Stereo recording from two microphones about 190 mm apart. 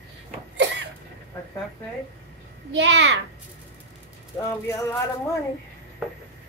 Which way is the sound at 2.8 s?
75° right (ahead or behind).